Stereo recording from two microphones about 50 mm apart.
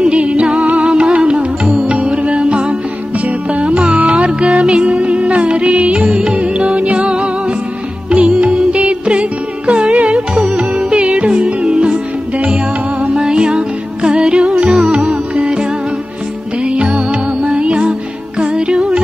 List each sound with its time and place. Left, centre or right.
0.0 s music: right
13.0 s music: centre
15.0 s music: right
16.6 s music: right